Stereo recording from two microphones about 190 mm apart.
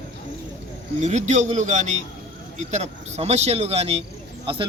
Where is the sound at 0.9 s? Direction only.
40° right (ahead or behind).